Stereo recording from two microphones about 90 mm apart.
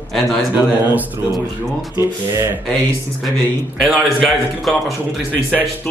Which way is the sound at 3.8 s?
5° right (ahead or behind).